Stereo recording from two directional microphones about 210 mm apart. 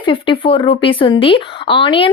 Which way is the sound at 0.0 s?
25° left (ahead or behind).